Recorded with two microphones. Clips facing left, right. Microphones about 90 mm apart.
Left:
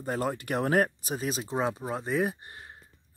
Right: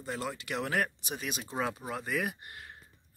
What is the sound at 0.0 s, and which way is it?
Speech, 45° left (ahead or behind).